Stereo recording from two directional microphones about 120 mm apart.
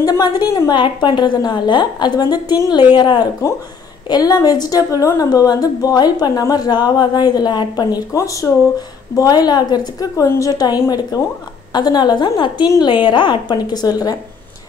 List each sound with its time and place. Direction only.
0.0 s a woman's voice: 30° left (ahead or behind)